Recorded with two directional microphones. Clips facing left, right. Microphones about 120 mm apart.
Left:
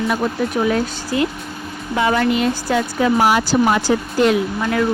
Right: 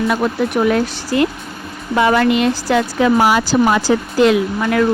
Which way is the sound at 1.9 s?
80° right.